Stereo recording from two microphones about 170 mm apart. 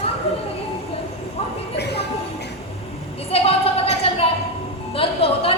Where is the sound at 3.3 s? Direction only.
35° left (ahead or behind).